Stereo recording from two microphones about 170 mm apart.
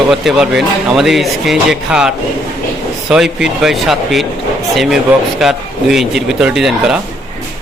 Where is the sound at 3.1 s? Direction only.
5° right (ahead or behind).